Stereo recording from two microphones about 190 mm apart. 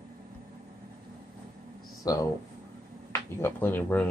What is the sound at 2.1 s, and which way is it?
Speech, 20° left (ahead or behind).